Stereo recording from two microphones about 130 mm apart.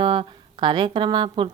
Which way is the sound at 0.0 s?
40° right (ahead or behind).